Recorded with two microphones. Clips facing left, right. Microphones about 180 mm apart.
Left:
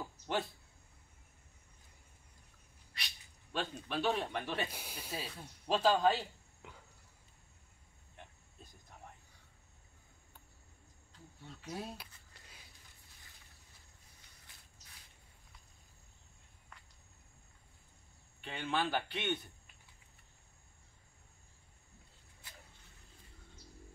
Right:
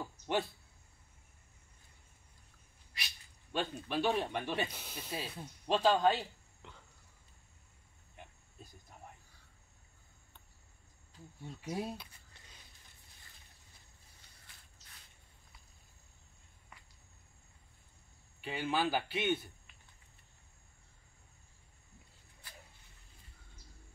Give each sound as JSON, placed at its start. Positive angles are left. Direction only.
{"t": 0.0, "sound": "a sound", "side_deg": 0}
{"t": 3.5, "sound": "a man's voice", "side_deg": 0}
{"t": 4.7, "sound": "speech", "side_deg": 10}
{"t": 5.1, "sound": "speech", "side_deg": -10}
{"t": 5.7, "sound": "a man's voice", "side_deg": 0}
{"t": 6.6, "sound": "a sound", "side_deg": 5}
{"t": 8.2, "sound": "a sound", "side_deg": -5}
{"t": 11.4, "sound": "speech", "side_deg": -15}
{"t": 18.4, "sound": "a man's voice", "side_deg": -5}